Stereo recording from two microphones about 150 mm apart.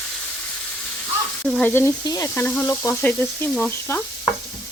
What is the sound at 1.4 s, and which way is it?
Sizzle, 5° left (ahead or behind).